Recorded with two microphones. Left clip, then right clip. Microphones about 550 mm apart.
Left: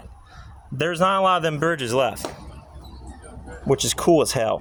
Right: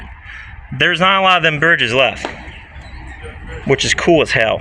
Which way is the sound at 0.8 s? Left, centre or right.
Left.